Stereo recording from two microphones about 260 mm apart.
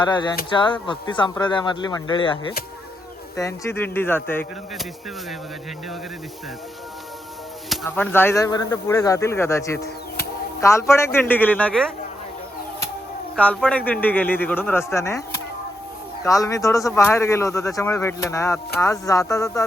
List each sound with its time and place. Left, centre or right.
0.0 s speech: centre
7.7 s speech: centre
13.3 s speech: centre